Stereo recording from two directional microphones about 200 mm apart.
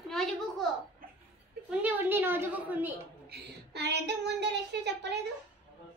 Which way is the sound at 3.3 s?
55° right (ahead or behind).